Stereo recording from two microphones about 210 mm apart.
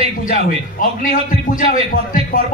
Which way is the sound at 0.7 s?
40° left (ahead or behind).